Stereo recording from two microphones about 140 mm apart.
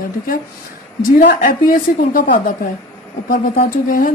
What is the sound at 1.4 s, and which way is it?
Speech, 90° left.